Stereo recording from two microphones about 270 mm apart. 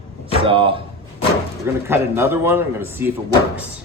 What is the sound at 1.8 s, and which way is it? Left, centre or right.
Speech, centre.